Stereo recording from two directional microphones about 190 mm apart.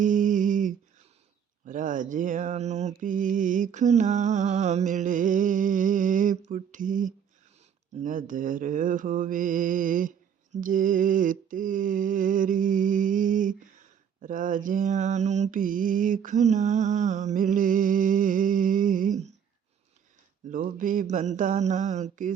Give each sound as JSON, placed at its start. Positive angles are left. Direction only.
{"t": 0.0, "sound": "humming", "side_deg": -45}
{"t": 1.6, "sound": "mantra", "side_deg": -45}
{"t": 20.5, "sound": "mantra", "side_deg": -45}